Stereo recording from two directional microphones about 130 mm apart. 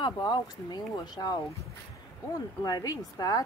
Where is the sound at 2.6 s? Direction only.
30° left (ahead or behind).